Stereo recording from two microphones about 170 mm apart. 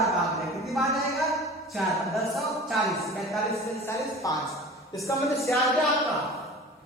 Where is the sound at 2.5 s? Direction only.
Centre (ahead or behind).